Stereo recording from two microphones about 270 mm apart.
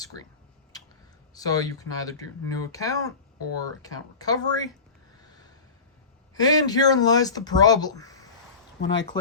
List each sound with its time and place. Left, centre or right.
1.3 s speech: centre
6.3 s speech: centre
8.8 s speech: left